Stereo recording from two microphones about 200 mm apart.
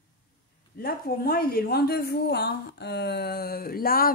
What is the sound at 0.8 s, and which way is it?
A woman's voice, 50° left (ahead or behind).